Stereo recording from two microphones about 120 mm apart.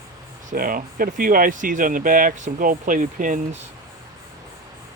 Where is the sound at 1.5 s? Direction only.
90° right.